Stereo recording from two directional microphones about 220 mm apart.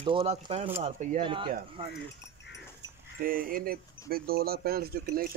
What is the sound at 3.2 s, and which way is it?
Speech, 40° right (ahead or behind).